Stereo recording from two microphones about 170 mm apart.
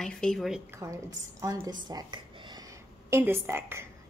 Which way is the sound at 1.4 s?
25° right (ahead or behind).